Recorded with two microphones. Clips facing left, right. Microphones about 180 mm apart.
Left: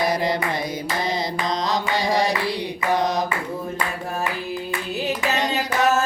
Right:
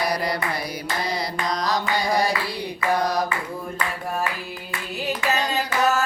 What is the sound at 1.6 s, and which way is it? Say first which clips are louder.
Music: even; 20° left (ahead or behind).